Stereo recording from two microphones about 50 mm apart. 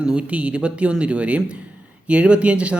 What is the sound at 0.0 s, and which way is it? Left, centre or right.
Speech, right.